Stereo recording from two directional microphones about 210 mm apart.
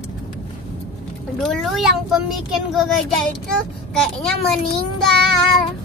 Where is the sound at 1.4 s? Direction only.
Centre (ahead or behind).